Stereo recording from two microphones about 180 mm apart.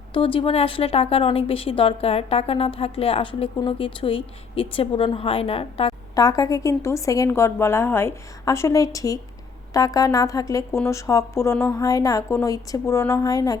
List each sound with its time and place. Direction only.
0.1 s speech: 30° left (ahead or behind)
6.1 s a woman's voice: 20° left (ahead or behind)